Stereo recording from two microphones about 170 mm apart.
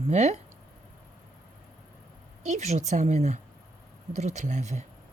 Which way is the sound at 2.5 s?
40° right (ahead or behind).